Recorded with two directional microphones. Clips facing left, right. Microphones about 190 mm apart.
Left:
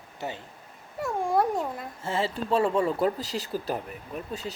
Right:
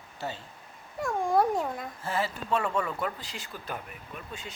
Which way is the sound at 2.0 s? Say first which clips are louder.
Left 4 dB; 25° left (ahead or behind).